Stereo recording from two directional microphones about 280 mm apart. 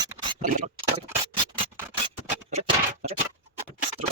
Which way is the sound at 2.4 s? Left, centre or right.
Right.